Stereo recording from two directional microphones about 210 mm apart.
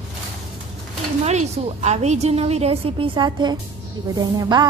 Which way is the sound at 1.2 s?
30° right (ahead or behind).